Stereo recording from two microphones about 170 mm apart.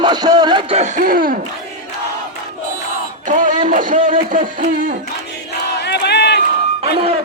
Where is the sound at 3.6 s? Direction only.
50° right (ahead or behind).